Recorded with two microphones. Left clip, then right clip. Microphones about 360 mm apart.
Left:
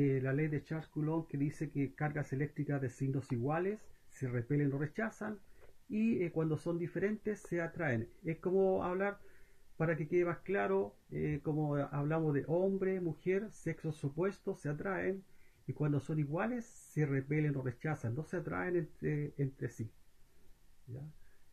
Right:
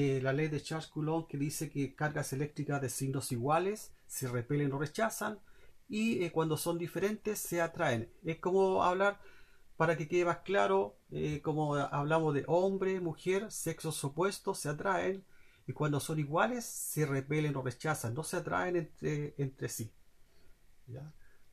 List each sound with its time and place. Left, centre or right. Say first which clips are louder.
0.0 s speech: right 2 dB; right